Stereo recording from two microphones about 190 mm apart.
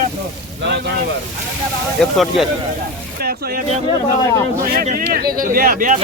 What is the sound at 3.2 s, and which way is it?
Speech, 55° right (ahead or behind).